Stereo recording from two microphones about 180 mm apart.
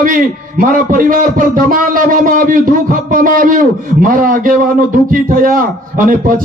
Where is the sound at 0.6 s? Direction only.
50° right (ahead or behind).